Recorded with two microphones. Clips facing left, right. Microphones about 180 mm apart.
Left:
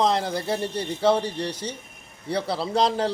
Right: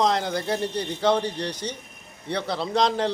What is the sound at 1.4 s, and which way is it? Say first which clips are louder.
Speech: even; 30° left (ahead or behind).